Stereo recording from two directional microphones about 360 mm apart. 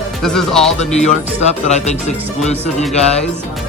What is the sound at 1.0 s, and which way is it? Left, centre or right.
Speech, centre.